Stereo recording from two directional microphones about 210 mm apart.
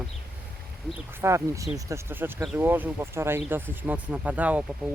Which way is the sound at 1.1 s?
10° right (ahead or behind).